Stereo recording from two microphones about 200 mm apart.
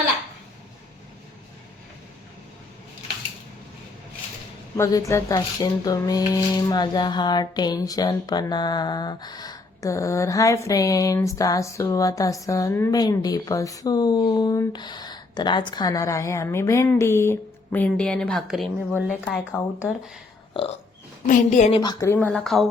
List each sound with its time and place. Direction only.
4.8 s speech: 15° left (ahead or behind)
20.5 s burping: 25° left (ahead or behind)
21.2 s a woman's voice: 40° left (ahead or behind)
21.7 s speech: 20° left (ahead or behind)
22.1 s speech: 5° left (ahead or behind)